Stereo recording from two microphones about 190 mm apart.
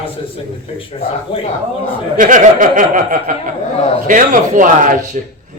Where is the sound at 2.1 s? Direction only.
45° right (ahead or behind).